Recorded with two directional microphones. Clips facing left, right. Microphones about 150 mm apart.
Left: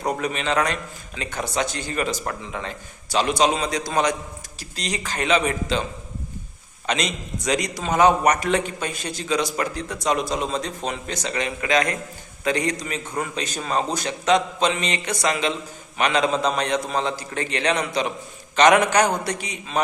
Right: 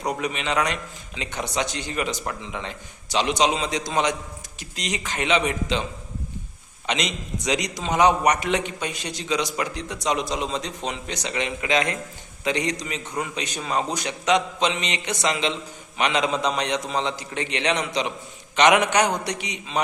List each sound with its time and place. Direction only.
0.2 s a man's voice: 15° right (ahead or behind)
5.1 s a man's voice: 40° left (ahead or behind)
5.5 s a man's voice: 20° right (ahead or behind)
6.9 s a man's voice: 20° right (ahead or behind)